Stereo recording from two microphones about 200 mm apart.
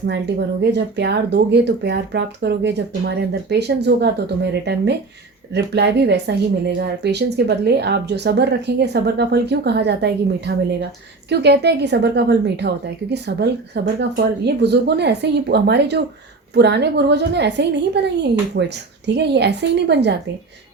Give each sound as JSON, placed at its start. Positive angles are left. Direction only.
{"t": 0.1, "sound": "a woman's voice", "side_deg": -60}